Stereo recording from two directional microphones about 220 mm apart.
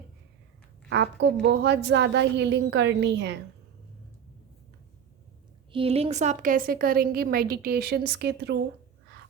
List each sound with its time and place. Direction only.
0.9 s a woman's voice: 50° right (ahead or behind)
5.7 s a woman's voice: 25° right (ahead or behind); by 8.5 s 50° right (ahead or behind)